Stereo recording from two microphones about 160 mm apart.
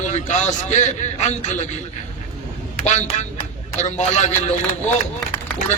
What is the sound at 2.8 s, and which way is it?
A man's voice, 50° left (ahead or behind).